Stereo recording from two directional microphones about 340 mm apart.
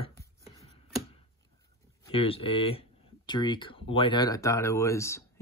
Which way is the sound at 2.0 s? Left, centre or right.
Centre.